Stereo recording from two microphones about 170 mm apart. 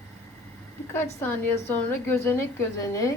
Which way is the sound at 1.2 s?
15° left (ahead or behind).